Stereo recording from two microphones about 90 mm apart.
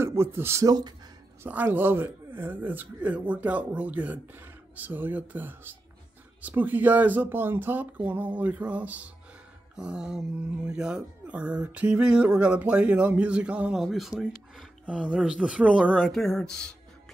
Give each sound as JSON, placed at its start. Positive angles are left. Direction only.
{"t": 0.0, "sound": "speech", "side_deg": -30}
{"t": 0.7, "sound": "speech", "side_deg": -50}
{"t": 1.4, "sound": "speech", "side_deg": -20}
{"t": 13.8, "sound": "speech", "side_deg": 0}
{"t": 16.1, "sound": "speech", "side_deg": 5}